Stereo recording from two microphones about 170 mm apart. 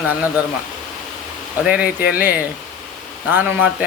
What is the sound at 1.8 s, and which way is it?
Speech, 65° left (ahead or behind).